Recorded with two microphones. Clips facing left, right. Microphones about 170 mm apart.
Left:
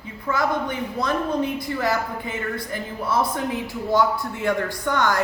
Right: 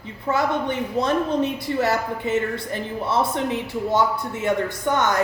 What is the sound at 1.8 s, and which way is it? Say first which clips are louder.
A man's voice: right 3 dB; 25° right (ahead or behind).